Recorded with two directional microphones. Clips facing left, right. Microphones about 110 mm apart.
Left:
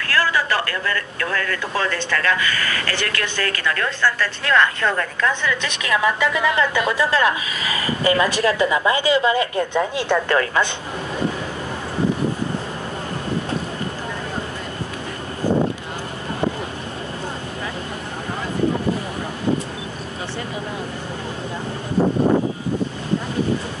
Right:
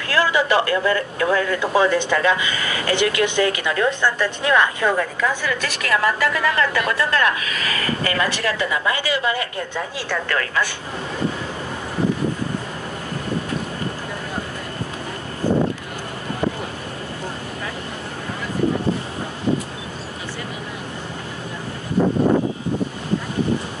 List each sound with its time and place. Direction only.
0.0 s speech: 20° right (ahead or behind)
5.8 s a woman's voice: 5° left (ahead or behind)
6.3 s a woman's voice: 20° left (ahead or behind)